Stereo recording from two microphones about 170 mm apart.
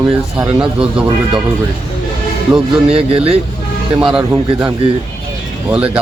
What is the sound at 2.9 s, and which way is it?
Speech, 35° right (ahead or behind).